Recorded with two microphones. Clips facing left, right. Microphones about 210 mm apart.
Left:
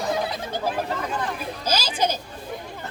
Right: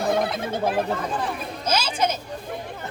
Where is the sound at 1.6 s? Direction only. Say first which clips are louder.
Right 1 dB; 35° left (ahead or behind).